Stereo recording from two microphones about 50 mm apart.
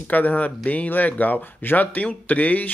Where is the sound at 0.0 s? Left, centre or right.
Left.